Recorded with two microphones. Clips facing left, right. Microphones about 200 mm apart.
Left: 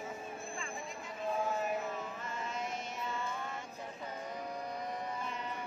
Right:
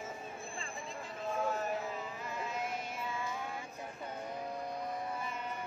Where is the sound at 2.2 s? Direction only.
5° right (ahead or behind).